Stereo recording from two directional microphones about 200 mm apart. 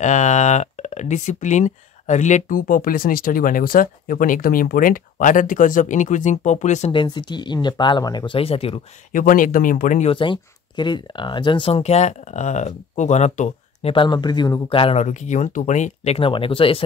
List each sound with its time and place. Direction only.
0.0 s speech: 35° left (ahead or behind)
9.1 s speech: 40° left (ahead or behind)
10.1 s speech: 25° left (ahead or behind)